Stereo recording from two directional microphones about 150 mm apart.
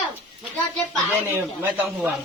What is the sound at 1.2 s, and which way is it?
Speech, 10° right (ahead or behind).